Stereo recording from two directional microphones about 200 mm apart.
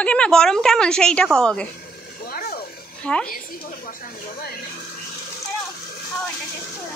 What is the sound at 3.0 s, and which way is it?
Speech, 5° left (ahead or behind).